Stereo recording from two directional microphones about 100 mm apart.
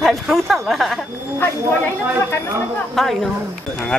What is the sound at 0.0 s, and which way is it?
Speech, centre (ahead or behind).